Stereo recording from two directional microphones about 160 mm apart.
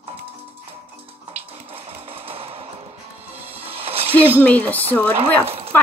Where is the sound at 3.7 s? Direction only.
40° right (ahead or behind).